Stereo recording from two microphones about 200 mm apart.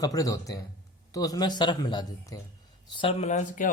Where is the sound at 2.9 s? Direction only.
30° left (ahead or behind).